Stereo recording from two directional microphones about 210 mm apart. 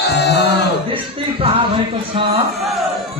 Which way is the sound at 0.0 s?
55° left (ahead or behind).